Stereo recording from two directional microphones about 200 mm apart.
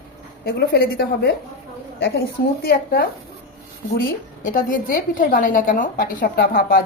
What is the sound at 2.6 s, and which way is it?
A woman's voice, 50° left (ahead or behind).